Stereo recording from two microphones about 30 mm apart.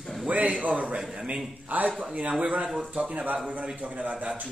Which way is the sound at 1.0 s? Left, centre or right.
Right.